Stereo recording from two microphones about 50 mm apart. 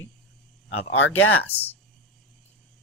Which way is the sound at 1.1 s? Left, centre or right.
Left.